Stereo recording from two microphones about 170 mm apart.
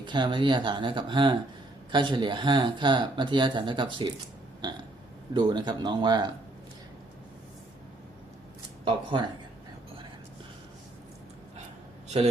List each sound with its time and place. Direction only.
0.0 s speech: 25° right (ahead or behind)
5.3 s speech: 25° right (ahead or behind)
8.8 s speech: 30° right (ahead or behind)
12.0 s a man's voice: 40° right (ahead or behind)